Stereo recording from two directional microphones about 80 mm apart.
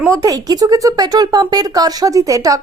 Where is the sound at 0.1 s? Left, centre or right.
Right.